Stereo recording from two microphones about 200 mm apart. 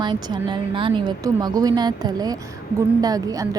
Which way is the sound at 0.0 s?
20° right (ahead or behind).